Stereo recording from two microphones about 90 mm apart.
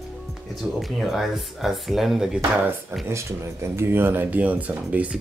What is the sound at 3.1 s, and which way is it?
Speech, 30° right (ahead or behind).